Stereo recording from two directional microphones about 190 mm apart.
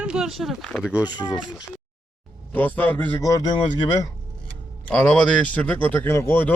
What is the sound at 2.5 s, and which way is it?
Speech, 10° left (ahead or behind).